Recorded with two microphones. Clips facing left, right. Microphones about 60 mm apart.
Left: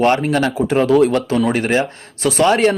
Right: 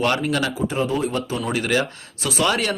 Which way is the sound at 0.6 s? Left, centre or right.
Left.